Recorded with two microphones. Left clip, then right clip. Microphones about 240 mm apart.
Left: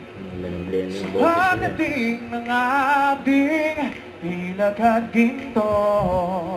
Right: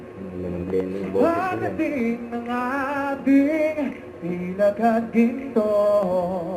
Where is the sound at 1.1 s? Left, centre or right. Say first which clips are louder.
Left 4 dB; left.